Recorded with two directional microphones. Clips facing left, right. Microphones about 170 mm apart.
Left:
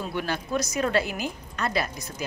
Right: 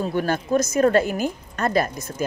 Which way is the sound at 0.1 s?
45° right (ahead or behind).